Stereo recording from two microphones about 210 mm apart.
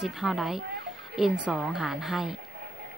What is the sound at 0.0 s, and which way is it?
Speech, centre (ahead or behind).